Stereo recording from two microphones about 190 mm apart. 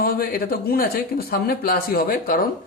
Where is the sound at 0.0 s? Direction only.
50° left (ahead or behind).